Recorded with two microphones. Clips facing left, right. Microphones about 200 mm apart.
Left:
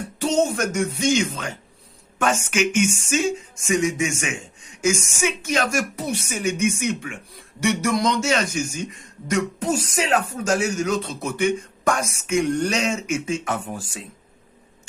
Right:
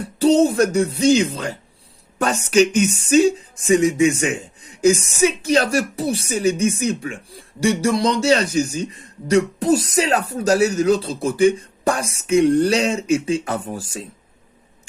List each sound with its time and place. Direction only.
0.0 s speech: 35° right (ahead or behind)